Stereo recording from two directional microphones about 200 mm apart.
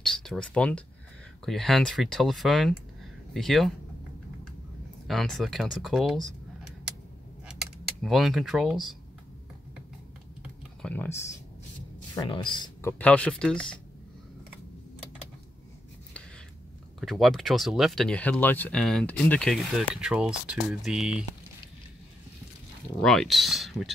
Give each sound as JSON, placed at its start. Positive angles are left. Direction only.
{"t": 0.0, "sound": "speech", "side_deg": 0}
{"t": 5.0, "sound": "speech", "side_deg": 0}
{"t": 7.4, "sound": "a sound", "side_deg": 0}
{"t": 10.4, "sound": "typing", "side_deg": 5}
{"t": 12.2, "sound": "speech", "side_deg": 25}
{"t": 13.0, "sound": "speech", "side_deg": 5}
{"t": 17.0, "sound": "speech", "side_deg": 0}
{"t": 23.0, "sound": "speech", "side_deg": 0}